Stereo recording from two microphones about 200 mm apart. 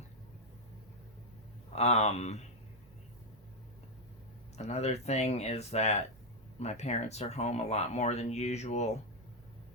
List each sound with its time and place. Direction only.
1.7 s speech: 30° left (ahead or behind)
4.5 s speech: 35° left (ahead or behind)